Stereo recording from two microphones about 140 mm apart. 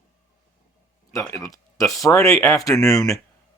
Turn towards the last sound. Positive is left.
turn(degrees=5)  # may be behind; listen again after turning